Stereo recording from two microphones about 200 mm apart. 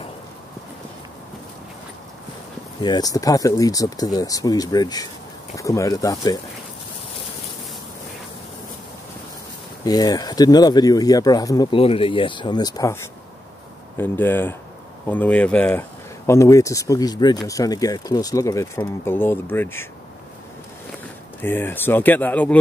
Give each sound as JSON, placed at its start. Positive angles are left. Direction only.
{"t": 2.8, "sound": "speech", "side_deg": 20}
{"t": 9.8, "sound": "speech", "side_deg": 20}
{"t": 21.4, "sound": "speech", "side_deg": 10}